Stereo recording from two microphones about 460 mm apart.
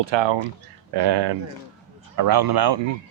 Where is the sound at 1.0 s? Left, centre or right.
Right.